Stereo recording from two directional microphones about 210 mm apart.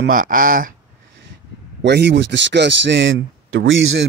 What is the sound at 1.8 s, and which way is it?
Speech, 55° right (ahead or behind).